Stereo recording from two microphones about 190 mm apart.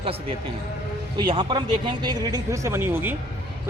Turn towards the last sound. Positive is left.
turn(degrees=-10)  # may be behind; listen again after turning